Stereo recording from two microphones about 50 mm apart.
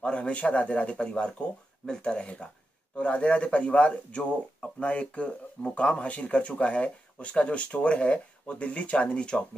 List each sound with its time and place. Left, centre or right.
0.0 s speech: left